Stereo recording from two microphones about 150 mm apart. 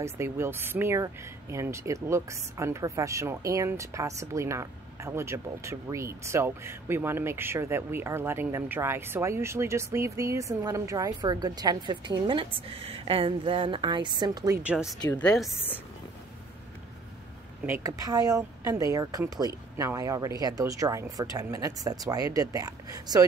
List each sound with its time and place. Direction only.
0.0 s speech: 15° right (ahead or behind)
14.7 s speech: 5° right (ahead or behind)
15.0 s speech: 10° left (ahead or behind)
17.8 s speech: 25° right (ahead or behind)